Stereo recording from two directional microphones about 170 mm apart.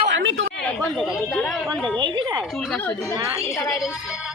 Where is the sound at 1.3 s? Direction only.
Centre (ahead or behind).